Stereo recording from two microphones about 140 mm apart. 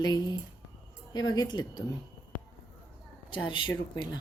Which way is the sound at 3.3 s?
35° left (ahead or behind).